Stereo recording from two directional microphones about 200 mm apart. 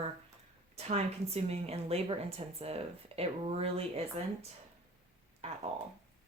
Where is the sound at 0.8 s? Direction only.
35° right (ahead or behind).